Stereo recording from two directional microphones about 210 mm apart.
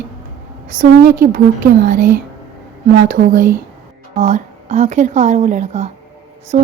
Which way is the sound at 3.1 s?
40° right (ahead or behind).